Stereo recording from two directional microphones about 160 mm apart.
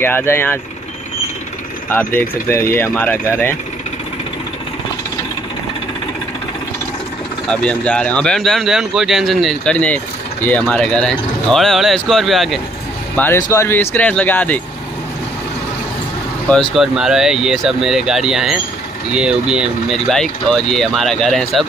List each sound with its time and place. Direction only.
0.0 s speech: 15° left (ahead or behind)
1.9 s speech: 10° left (ahead or behind)
7.4 s speech: 5° left (ahead or behind)
13.1 s speech: 10° left (ahead or behind)
16.7 s speech: centre (ahead or behind)